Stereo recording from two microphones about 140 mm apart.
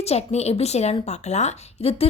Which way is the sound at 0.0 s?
50° left (ahead or behind).